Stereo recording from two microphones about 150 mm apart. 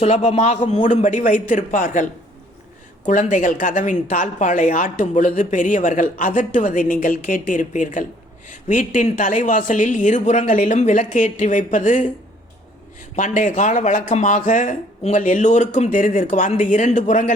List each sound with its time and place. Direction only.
0.0 s a man's voice: 45° left (ahead or behind)
3.1 s speech: 60° left (ahead or behind)
13.1 s speech: 60° left (ahead or behind)